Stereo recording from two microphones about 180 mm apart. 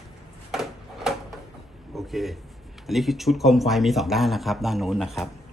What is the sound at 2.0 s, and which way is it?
Speech, centre (ahead or behind).